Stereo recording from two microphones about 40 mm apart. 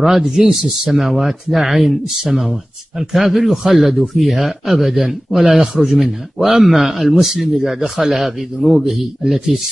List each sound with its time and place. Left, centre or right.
0.0 s a man's voice: centre
5.6 s a man's voice: centre
5.9 s a man's voice: centre